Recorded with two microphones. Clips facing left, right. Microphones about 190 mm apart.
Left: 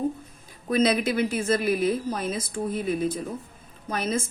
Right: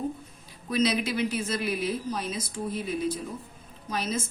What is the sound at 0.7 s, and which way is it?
A woman's voice, 50° left (ahead or behind).